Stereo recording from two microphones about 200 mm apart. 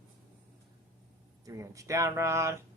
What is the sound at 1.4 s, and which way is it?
Speech, 15° right (ahead or behind).